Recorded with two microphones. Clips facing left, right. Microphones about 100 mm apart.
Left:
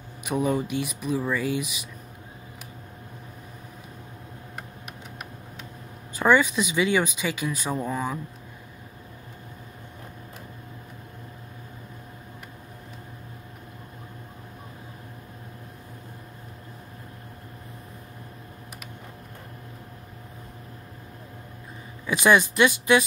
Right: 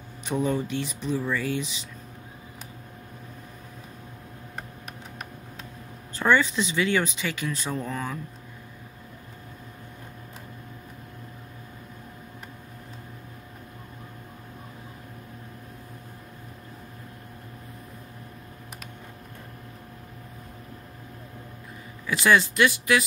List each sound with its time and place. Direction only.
0.2 s speech: 10° left (ahead or behind)
6.1 s speech: 15° left (ahead or behind)
22.0 s speech: 20° left (ahead or behind)